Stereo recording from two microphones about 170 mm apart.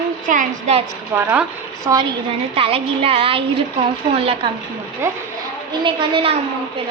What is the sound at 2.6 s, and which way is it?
A woman's voice, 35° right (ahead or behind).